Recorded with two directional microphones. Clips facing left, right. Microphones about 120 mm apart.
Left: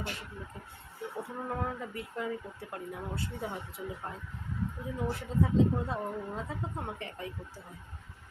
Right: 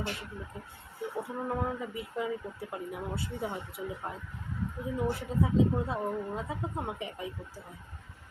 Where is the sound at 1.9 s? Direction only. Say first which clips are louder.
Right 2 dB; 5° right (ahead or behind).